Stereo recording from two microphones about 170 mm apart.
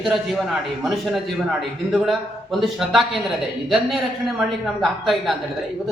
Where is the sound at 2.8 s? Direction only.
Centre (ahead or behind).